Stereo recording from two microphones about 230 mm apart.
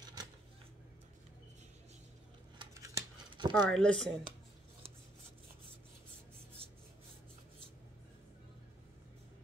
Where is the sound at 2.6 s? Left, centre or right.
Centre.